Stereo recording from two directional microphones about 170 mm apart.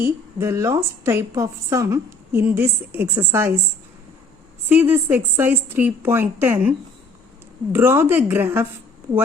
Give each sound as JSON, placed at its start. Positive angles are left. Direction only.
{"t": 0.0, "sound": "a woman's voice", "side_deg": -15}
{"t": 4.7, "sound": "a woman's voice", "side_deg": -10}